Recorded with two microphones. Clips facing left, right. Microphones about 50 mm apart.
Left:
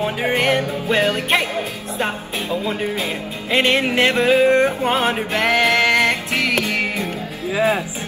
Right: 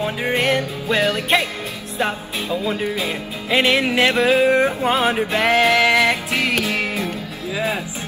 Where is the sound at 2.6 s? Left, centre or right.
Centre.